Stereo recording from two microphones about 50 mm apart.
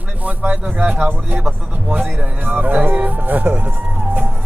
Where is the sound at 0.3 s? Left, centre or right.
Right.